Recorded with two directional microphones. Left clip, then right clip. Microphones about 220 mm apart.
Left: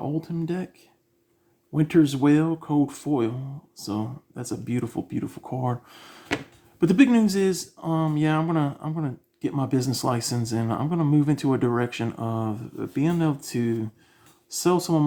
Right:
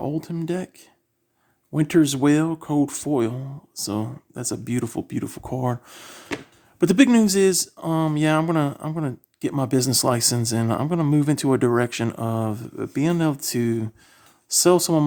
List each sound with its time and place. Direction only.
0.0 s speech: 50° right (ahead or behind)